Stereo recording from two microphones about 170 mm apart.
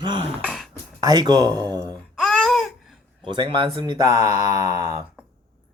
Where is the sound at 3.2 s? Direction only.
30° right (ahead or behind).